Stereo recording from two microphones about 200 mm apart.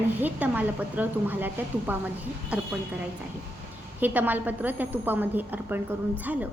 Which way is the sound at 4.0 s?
10° right (ahead or behind).